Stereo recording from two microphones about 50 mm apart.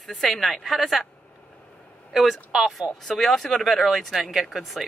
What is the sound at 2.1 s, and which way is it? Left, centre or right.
Speech, centre.